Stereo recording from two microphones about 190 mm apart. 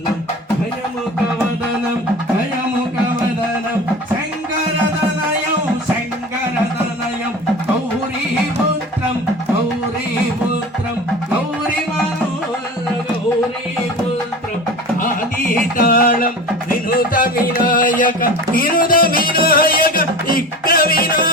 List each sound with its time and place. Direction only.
15.9 s music: 50° left (ahead or behind)